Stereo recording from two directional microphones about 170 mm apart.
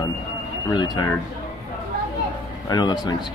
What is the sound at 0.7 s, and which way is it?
Speech, 25° left (ahead or behind).